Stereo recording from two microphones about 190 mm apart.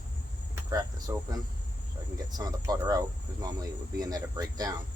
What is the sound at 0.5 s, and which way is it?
Speech, 20° right (ahead or behind).